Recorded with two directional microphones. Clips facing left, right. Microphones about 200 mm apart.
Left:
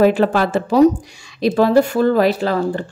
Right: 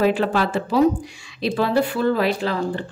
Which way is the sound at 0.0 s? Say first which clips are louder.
Left 5 dB; 45° left (ahead or behind).